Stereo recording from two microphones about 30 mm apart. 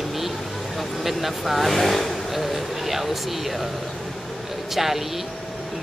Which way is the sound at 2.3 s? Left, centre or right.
Centre.